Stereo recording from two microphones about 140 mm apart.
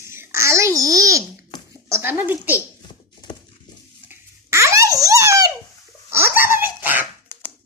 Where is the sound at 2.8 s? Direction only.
30° left (ahead or behind).